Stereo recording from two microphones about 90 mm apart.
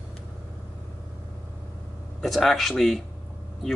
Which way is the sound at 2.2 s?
Centre (ahead or behind).